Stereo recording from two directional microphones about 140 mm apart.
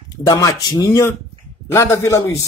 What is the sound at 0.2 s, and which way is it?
A man's voice, 25° left (ahead or behind).